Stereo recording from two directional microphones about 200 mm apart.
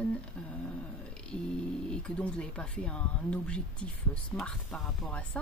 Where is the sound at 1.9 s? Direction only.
5° left (ahead or behind).